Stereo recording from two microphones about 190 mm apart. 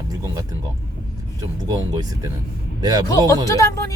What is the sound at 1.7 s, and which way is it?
A man's voice, 20° right (ahead or behind).